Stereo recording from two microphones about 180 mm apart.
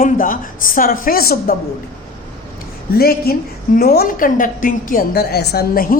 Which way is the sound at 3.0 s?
60° left (ahead or behind).